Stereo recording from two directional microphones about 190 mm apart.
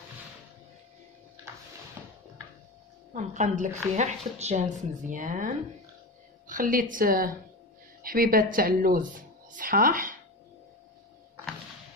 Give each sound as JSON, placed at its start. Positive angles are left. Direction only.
{"t": 2.0, "sound": "music", "side_deg": -15}
{"t": 3.2, "sound": "a woman's voice", "side_deg": -40}